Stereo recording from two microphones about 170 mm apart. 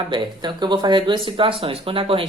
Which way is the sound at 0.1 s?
30° right (ahead or behind).